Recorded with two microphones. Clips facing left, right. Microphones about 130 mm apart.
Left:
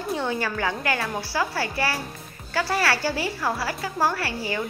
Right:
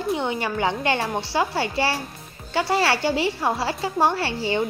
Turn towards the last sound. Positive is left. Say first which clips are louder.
# right 4 dB
turn(degrees=-25)  # may be behind; listen again after turning